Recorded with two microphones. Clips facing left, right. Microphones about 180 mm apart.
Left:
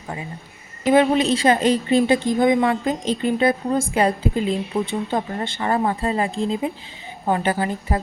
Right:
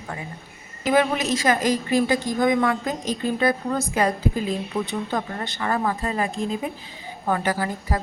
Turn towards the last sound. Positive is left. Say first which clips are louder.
# left 3 dB
turn(degrees=25)  # may be behind; listen again after turning